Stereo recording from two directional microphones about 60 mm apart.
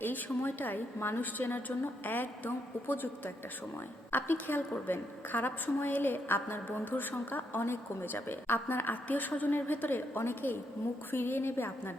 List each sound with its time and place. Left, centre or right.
0.0 s a woman's voice: left
0.9 s a woman's voice: left
1.2 s a woman's voice: left